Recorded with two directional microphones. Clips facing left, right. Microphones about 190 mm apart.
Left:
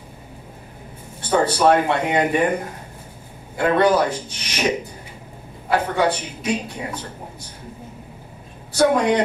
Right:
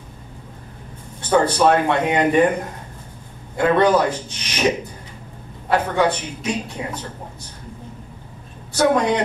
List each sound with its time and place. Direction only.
1.2 s speech: 10° left (ahead or behind)
3.7 s speech: 10° left (ahead or behind)
8.7 s speech: 10° left (ahead or behind)